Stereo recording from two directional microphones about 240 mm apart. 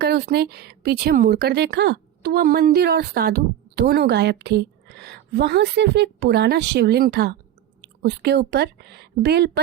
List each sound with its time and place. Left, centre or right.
0.0 s speech: right